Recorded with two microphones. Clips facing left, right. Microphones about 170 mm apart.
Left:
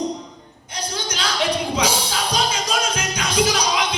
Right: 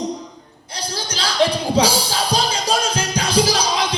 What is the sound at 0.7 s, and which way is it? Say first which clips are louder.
Music: even; 30° right (ahead or behind).